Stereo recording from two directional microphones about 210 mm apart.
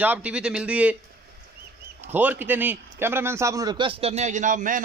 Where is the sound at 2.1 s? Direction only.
10° right (ahead or behind).